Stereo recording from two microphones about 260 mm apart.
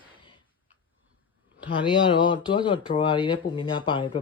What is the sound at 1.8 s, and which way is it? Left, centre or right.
Speech, centre.